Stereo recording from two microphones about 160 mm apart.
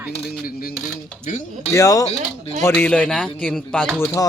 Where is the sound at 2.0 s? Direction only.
40° left (ahead or behind).